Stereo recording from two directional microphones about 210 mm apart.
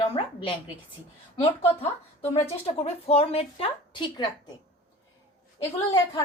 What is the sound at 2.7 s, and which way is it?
A woman's voice, 30° left (ahead or behind).